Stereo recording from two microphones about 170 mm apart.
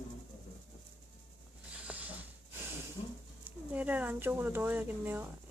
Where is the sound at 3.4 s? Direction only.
10° right (ahead or behind).